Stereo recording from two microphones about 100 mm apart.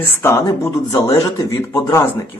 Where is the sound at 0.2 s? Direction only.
25° left (ahead or behind).